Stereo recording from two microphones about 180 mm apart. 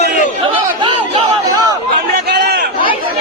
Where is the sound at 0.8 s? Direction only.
30° right (ahead or behind).